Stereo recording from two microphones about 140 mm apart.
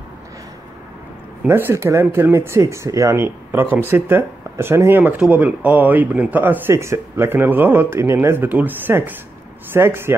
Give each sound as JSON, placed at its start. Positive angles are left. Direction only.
{"t": 1.5, "sound": "speech", "side_deg": -20}